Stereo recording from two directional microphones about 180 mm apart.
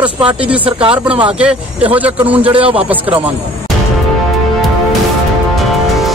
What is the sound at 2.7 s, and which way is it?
Speech, 10° right (ahead or behind).